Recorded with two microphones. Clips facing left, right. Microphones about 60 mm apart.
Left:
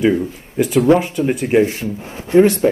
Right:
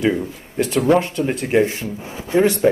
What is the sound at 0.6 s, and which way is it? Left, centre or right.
Speech, centre.